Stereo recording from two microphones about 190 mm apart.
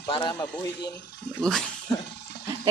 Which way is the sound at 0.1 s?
25° left (ahead or behind).